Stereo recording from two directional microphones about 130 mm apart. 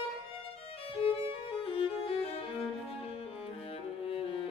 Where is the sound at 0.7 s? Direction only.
45° left (ahead or behind).